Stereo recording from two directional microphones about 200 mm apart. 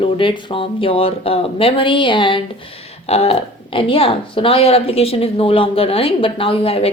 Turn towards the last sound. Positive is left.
turn(degrees=30)  # may be behind; listen again after turning